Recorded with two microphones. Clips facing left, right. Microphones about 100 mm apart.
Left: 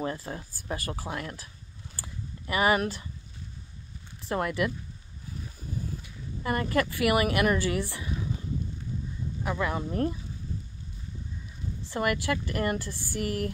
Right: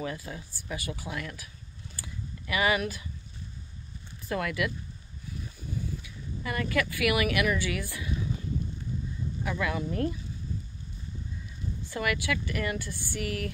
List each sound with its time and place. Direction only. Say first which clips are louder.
0.0 s speech: left 3 dB; 35° left (ahead or behind)
2.0 s a sound: even; 35° left (ahead or behind)
4.3 s speech: left 2 dB; 30° left (ahead or behind)
6.4 s speech: left 3 dB; 35° left (ahead or behind)
9.4 s speech: left 1 dB; 30° left (ahead or behind)
11.9 s speech: left 3 dB; 35° left (ahead or behind)